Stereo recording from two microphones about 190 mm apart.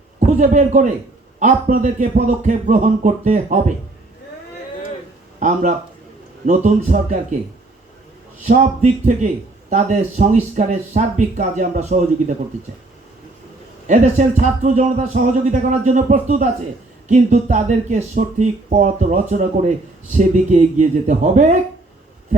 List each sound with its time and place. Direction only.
0.2 s a man's voice: 40° right (ahead or behind)
5.4 s speech: 40° right (ahead or behind)
8.4 s speech: 40° right (ahead or behind)
13.8 s speech: 40° right (ahead or behind)